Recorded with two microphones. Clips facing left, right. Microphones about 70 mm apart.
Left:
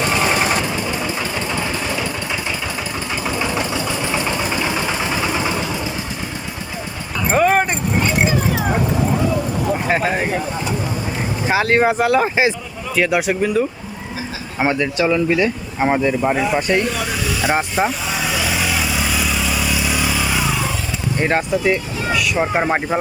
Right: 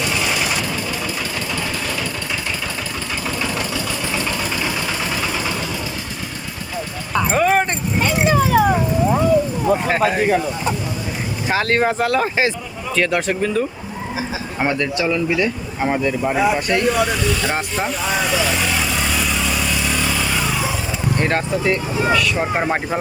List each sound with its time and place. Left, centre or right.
0.0 s vehicle: left
0.6 s vehicle: left
3.2 s engine: centre
7.3 s dog: centre
8.0 s vehicle: right
11.4 s speech: centre
16.3 s speech: centre
16.6 s speech: left
16.8 s speech: centre
18.1 s vehicle: centre
21.2 s speech: centre